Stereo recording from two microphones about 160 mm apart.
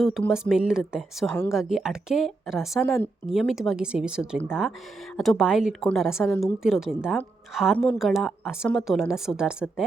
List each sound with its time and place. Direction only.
0.0 s speech: centre (ahead or behind)